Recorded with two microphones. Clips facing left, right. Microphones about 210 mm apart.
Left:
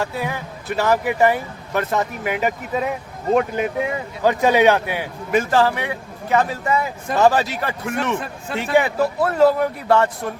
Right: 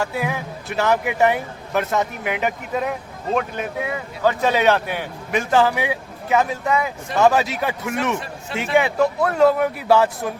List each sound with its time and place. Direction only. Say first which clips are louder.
0.0 s speech: right 1 dB; centre (ahead or behind)
4.2 s speech: left 3 dB; 15° left (ahead or behind); by 10.3 s 5° right (ahead or behind)